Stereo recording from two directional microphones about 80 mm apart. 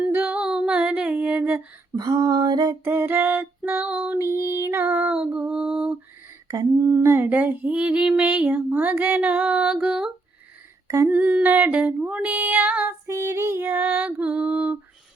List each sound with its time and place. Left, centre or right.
0.1 s female singing: right
0.3 s music: centre
2.0 s female singing: right
2.8 s female singing: right; by 5.9 s centre
6.7 s female singing: right
7.3 s a sound: right
10.8 s a sound: right
11.1 s female singing: centre
13.1 s female singing: right
13.7 s female singing: centre